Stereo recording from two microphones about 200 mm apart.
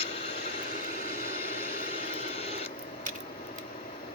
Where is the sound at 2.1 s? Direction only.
30° left (ahead or behind).